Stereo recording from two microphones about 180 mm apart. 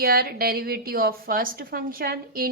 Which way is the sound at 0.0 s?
55° right (ahead or behind).